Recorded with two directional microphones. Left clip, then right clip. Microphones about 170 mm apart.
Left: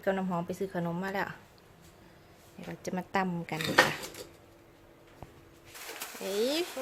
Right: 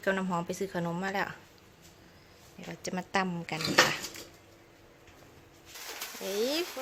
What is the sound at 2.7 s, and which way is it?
Speech, 5° left (ahead or behind).